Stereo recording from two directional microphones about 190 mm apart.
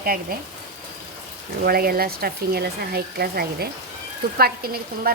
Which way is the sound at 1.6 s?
55° right (ahead or behind).